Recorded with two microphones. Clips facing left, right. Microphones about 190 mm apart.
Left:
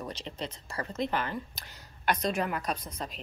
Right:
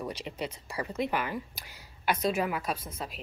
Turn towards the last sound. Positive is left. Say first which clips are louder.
# even
turn(degrees=-5)  # may be behind; listen again after turning